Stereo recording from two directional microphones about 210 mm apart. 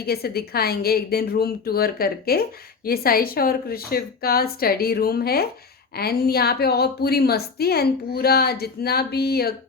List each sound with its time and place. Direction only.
0.0 s a woman's voice: 50° left (ahead or behind)